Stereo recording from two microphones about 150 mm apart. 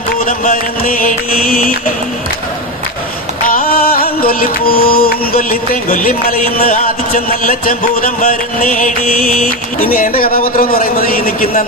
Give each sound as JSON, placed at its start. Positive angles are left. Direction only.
{"t": 0.2, "sound": "music", "side_deg": 60}
{"t": 3.4, "sound": "music", "side_deg": 70}